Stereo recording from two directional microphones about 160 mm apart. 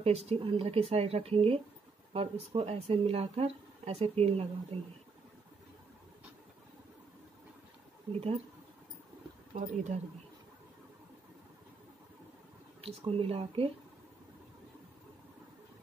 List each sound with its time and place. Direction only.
0.0 s speech: 40° right (ahead or behind)
8.1 s speech: 40° right (ahead or behind)
9.5 s speech: 50° right (ahead or behind)
12.8 s speech: 35° right (ahead or behind)